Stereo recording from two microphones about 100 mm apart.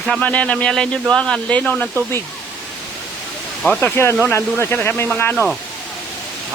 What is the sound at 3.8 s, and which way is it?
Speech, 20° left (ahead or behind).